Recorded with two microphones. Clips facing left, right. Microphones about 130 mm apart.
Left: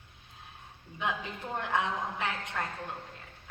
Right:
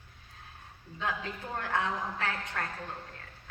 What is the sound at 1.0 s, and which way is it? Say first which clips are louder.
A woman's voice: left 1 dB; 20° left (ahead or behind).